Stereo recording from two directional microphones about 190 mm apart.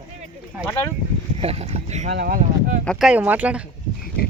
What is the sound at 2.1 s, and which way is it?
Speech, 55° right (ahead or behind).